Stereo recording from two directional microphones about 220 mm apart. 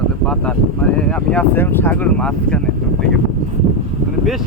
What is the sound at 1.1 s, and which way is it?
Speech, 5° left (ahead or behind).